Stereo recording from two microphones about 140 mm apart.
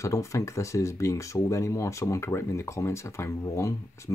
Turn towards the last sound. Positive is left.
turn(degrees=20)  # may be behind; listen again after turning